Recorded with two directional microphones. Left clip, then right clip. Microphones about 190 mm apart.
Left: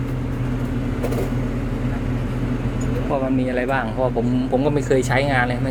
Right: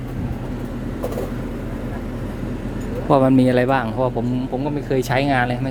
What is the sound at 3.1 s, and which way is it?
A man's voice, 40° right (ahead or behind).